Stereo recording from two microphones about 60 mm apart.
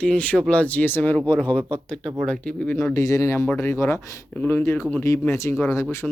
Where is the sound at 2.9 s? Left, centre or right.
Left.